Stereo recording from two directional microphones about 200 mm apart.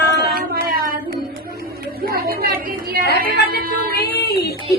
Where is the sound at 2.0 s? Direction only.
50° right (ahead or behind).